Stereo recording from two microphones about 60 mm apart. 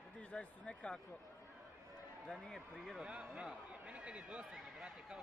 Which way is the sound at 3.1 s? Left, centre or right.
Centre.